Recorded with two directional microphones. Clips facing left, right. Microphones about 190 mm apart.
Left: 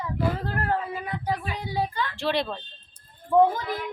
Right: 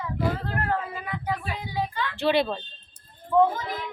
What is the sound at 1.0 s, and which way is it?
Child singing, 35° left (ahead or behind).